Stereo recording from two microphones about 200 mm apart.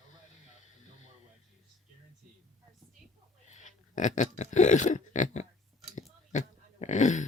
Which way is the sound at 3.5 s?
40° left (ahead or behind).